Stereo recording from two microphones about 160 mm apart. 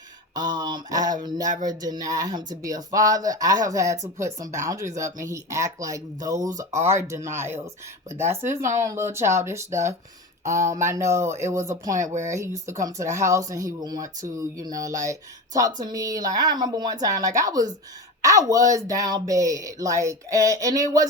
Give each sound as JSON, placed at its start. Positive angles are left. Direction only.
{"t": 0.3, "sound": "speech", "side_deg": -25}
{"t": 8.4, "sound": "speech", "side_deg": -50}
{"t": 8.8, "sound": "speech", "side_deg": -20}
{"t": 10.4, "sound": "speech", "side_deg": -50}
{"t": 10.8, "sound": "speech", "side_deg": -15}
{"t": 12.0, "sound": "speech", "side_deg": -50}
{"t": 12.3, "sound": "speech", "side_deg": -20}